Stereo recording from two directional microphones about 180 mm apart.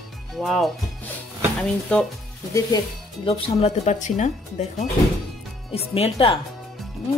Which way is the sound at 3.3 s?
40° left (ahead or behind).